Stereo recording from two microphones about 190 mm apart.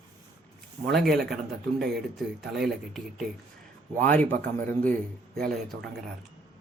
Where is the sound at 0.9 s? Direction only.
Centre (ahead or behind).